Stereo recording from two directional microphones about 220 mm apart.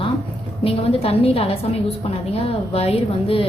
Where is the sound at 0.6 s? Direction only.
25° left (ahead or behind).